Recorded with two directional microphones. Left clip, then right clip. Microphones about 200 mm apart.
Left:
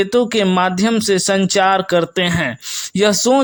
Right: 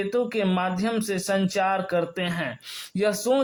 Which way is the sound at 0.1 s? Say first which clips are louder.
Left 10 dB; 35° left (ahead or behind).